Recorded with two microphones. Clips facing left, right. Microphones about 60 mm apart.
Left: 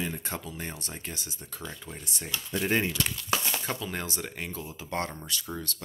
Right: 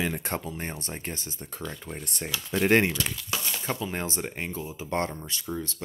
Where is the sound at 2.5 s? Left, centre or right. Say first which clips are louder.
Right 6 dB; right.